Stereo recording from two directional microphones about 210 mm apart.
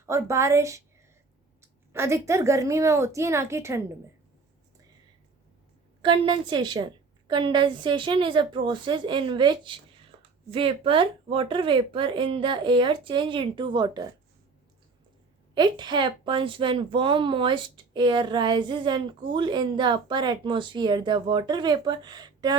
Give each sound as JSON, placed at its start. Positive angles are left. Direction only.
{"t": 0.0, "sound": "a woman's voice", "side_deg": -15}
{"t": 1.9, "sound": "a woman's voice", "side_deg": -10}
{"t": 6.0, "sound": "a woman's voice", "side_deg": -25}
{"t": 15.5, "sound": "a woman's voice", "side_deg": -20}